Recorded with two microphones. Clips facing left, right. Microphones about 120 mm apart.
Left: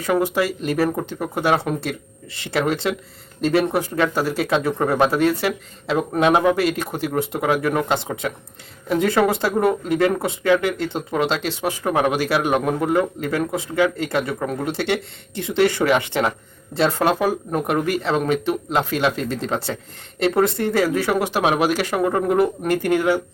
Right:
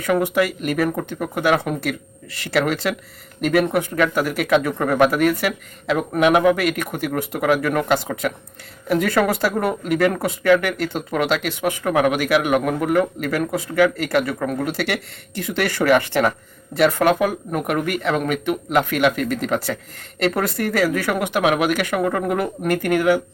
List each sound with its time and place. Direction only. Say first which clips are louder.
0.0 s speech: right 1 dB; 30° left (ahead or behind)